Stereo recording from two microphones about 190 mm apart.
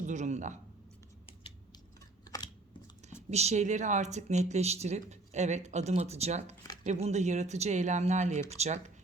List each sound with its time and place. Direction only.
0.0 s speech: 40° right (ahead or behind)
1.3 s typing: 25° left (ahead or behind)
2.2 s scissors: 20° left (ahead or behind)
3.2 s speech: 35° right (ahead or behind)